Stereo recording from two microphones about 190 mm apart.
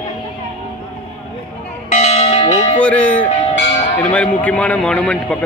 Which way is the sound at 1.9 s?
35° left (ahead or behind).